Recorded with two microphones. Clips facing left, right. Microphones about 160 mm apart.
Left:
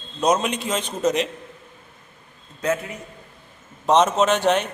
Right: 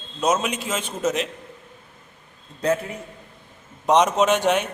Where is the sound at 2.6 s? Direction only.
35° right (ahead or behind).